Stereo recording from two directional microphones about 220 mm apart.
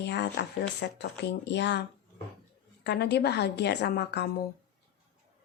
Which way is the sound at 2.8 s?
50° left (ahead or behind).